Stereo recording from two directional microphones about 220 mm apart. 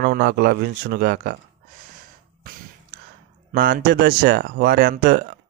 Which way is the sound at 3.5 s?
50° right (ahead or behind).